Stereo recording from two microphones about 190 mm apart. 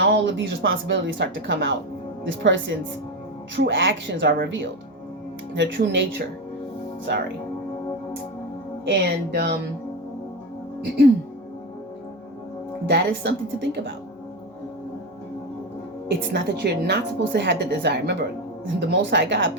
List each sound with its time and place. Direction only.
0.0 s a woman's voice: 70° right (ahead or behind)
8.8 s a woman's voice: 65° right (ahead or behind)
12.8 s a woman's voice: 60° right (ahead or behind)
16.0 s a woman's voice: 65° right (ahead or behind)